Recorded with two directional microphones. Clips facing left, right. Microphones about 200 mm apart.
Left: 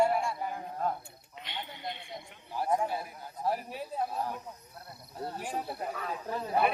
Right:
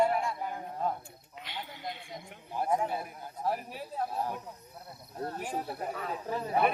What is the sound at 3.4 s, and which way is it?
Speech, 15° left (ahead or behind).